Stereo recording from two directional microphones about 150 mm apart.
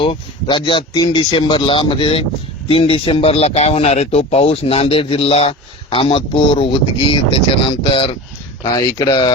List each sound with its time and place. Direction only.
0.0 s speech: 35° left (ahead or behind)